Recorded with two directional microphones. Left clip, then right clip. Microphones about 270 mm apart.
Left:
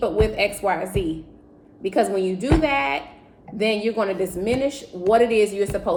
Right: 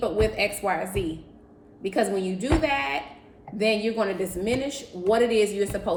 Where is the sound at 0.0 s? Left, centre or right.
Centre.